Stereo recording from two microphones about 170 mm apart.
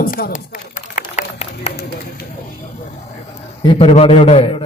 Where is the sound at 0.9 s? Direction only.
45° left (ahead or behind).